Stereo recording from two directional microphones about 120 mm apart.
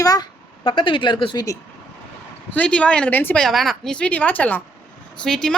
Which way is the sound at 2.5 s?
10° left (ahead or behind).